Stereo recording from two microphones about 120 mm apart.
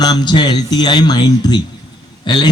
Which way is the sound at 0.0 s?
35° left (ahead or behind).